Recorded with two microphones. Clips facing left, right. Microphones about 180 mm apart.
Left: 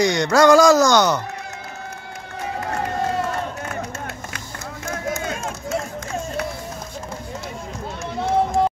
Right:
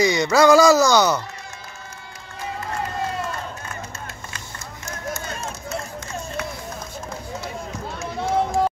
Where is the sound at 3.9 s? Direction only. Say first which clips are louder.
Left 5 dB; 60° left (ahead or behind).